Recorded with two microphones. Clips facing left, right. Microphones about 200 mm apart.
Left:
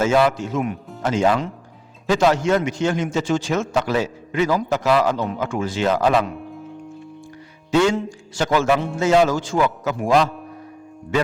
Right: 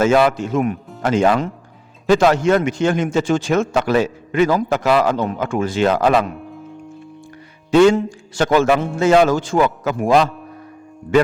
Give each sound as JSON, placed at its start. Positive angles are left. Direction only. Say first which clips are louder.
{"t": 0.0, "sound": "a man's voice", "louder": "right 3 dB", "side_deg": -60}
{"t": 7.7, "sound": "a man's voice", "louder": "right 6 dB", "side_deg": -55}